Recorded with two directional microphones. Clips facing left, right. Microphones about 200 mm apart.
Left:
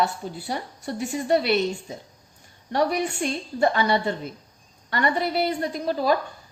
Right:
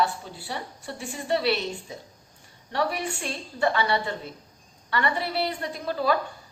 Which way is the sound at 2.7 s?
40° left (ahead or behind).